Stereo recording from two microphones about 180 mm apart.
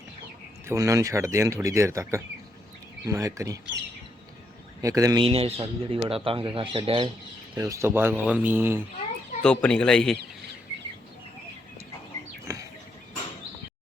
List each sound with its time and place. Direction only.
0.6 s speech: 15° right (ahead or behind)
4.8 s a man's voice: 20° right (ahead or behind)
5.3 s speech: 35° right (ahead or behind)
7.5 s speech: 15° right (ahead or behind)
9.4 s speech: 5° left (ahead or behind)
12.5 s a sound: 20° right (ahead or behind)